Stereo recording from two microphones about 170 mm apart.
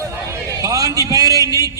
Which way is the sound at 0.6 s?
20° right (ahead or behind).